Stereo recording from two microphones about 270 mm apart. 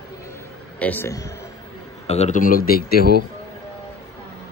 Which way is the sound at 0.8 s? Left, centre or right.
Centre.